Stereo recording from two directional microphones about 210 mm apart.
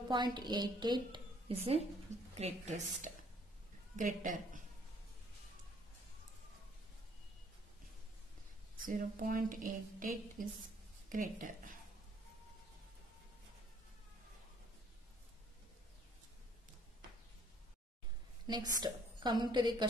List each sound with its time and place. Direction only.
0.1 s a woman's voice: 20° right (ahead or behind); by 4.6 s 40° right (ahead or behind)
8.8 s a woman's voice: 40° right (ahead or behind)
18.5 s a woman's voice: 20° right (ahead or behind)